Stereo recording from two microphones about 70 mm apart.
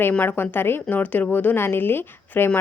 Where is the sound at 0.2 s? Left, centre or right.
Left.